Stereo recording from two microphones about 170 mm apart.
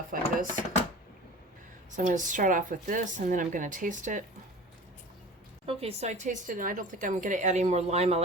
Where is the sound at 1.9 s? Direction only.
50° right (ahead or behind).